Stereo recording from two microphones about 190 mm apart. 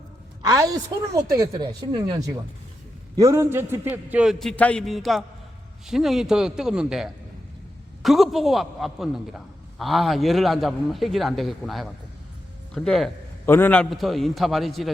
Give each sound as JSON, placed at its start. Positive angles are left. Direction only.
{"t": 0.4, "sound": "a woman's voice", "side_deg": -20}